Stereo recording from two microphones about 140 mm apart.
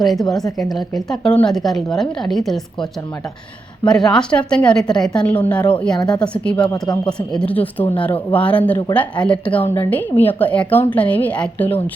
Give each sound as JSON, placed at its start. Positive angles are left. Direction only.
{"t": 0.0, "sound": "a woman's voice", "side_deg": 0}
{"t": 3.8, "sound": "a woman's voice", "side_deg": 5}
{"t": 6.6, "sound": "speech", "side_deg": 35}
{"t": 7.3, "sound": "a woman's voice", "side_deg": 10}